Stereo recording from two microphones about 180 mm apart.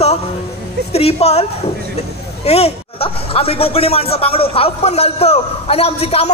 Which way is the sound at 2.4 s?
35° left (ahead or behind).